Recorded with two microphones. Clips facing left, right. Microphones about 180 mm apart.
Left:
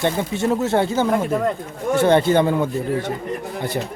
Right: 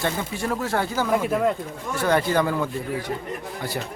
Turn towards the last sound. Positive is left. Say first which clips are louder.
# left 6 dB
turn(degrees=25)  # may be behind; listen again after turning